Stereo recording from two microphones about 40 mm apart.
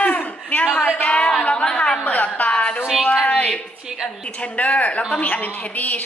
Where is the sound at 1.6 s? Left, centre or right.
Centre.